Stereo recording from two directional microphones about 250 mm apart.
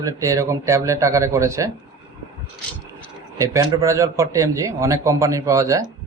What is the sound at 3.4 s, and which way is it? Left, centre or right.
A man's voice, centre.